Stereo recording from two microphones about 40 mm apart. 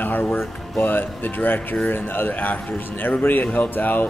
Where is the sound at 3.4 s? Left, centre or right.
Left.